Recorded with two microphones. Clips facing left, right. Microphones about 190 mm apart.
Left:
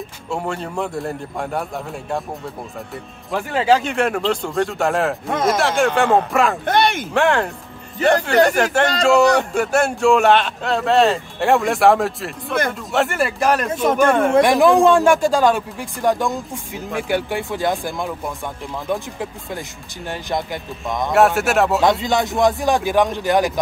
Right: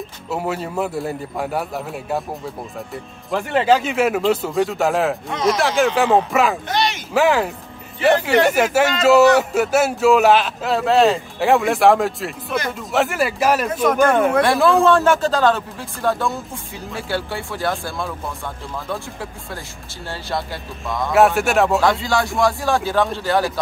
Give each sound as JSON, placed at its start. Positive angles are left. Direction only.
{"t": 0.3, "sound": "speech", "side_deg": -5}
{"t": 3.3, "sound": "speech", "side_deg": 0}
{"t": 5.3, "sound": "speech", "side_deg": 50}
{"t": 5.6, "sound": "speech", "side_deg": 0}
{"t": 6.6, "sound": "speech", "side_deg": 55}
{"t": 7.2, "sound": "speech", "side_deg": -5}
{"t": 14.3, "sound": "speech", "side_deg": 15}
{"t": 21.1, "sound": "speech", "side_deg": 0}
{"t": 21.8, "sound": "speech", "side_deg": 20}